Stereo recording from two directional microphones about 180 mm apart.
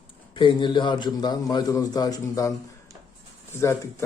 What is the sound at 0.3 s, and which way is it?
A man's voice, 25° left (ahead or behind).